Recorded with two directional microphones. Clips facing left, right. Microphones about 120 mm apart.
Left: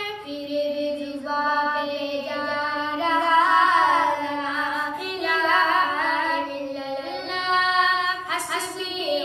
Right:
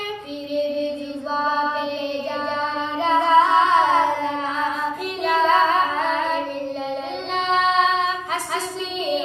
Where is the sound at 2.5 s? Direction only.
30° right (ahead or behind).